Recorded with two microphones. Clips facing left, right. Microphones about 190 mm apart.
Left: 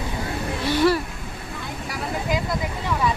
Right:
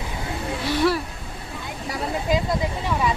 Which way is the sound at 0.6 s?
Centre (ahead or behind).